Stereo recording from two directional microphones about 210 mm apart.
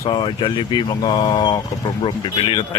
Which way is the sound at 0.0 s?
20° left (ahead or behind).